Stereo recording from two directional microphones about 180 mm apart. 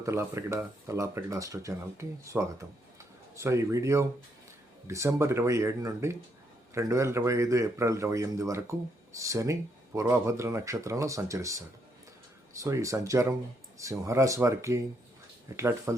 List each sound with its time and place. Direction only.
0.0 s speech: 15° right (ahead or behind)